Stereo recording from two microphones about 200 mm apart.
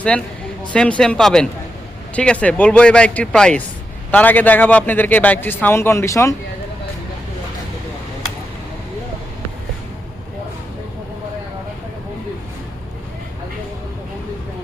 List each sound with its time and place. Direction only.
0.1 s a man's voice: 5° left (ahead or behind)